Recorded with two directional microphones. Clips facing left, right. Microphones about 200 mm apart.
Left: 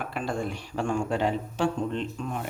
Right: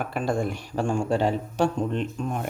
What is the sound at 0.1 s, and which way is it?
Speech, 45° right (ahead or behind).